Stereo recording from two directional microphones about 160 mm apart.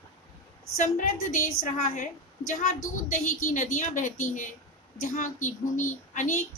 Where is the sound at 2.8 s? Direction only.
50° left (ahead or behind).